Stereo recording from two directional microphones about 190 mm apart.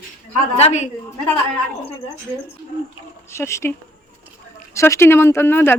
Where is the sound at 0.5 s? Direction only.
35° left (ahead or behind).